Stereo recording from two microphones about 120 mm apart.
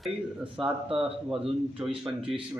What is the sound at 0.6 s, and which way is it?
Speech, centre (ahead or behind).